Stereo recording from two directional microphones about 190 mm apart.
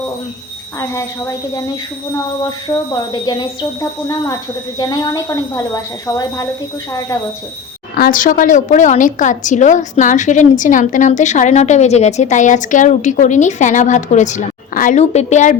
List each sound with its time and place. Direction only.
0.8 s a woman's voice: 15° left (ahead or behind)
2.9 s a woman's voice: 20° left (ahead or behind)
7.9 s a woman's voice: 50° left (ahead or behind)